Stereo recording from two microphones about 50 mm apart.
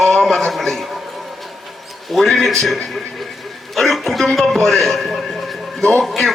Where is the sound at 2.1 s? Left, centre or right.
Centre.